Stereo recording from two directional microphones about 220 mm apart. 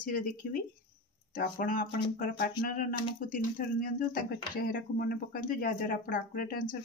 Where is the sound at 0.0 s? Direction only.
40° left (ahead or behind).